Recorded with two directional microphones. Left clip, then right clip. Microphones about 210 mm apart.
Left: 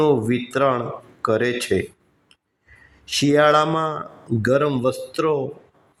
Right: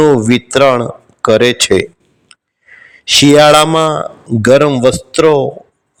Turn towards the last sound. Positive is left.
turn(degrees=-35)  # may be behind; listen again after turning